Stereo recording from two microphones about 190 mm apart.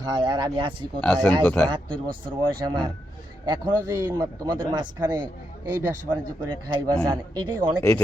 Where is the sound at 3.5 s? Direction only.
20° right (ahead or behind).